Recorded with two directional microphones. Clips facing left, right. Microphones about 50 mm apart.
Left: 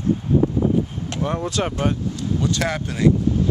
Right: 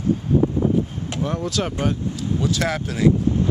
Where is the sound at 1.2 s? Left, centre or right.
Centre.